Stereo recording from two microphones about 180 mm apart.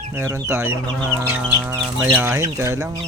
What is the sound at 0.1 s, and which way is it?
Speech, 15° right (ahead or behind).